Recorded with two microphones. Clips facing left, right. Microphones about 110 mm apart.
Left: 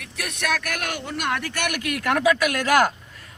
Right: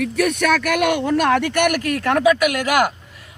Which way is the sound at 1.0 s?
90° right.